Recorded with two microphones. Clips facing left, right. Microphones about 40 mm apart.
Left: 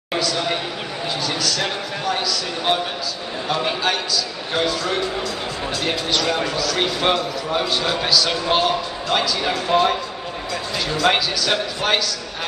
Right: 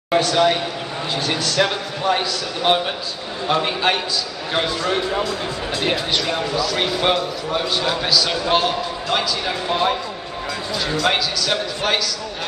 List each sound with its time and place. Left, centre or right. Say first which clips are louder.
0.2 s a man's voice: right 3 dB; right
5.8 s speech: right 1 dB; centre
6.8 s a man's voice: left 1 dB; centre
9.5 s speech: left 3 dB; centre
11.0 s a man's voice: left 2 dB; centre